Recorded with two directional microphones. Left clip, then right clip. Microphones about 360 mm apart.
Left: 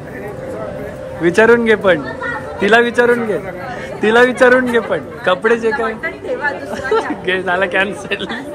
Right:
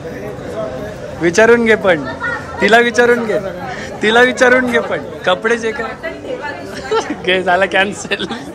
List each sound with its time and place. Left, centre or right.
1.2 s a man's voice: centre
6.9 s speech: centre